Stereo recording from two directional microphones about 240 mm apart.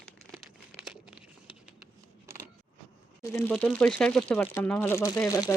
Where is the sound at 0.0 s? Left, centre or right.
Centre.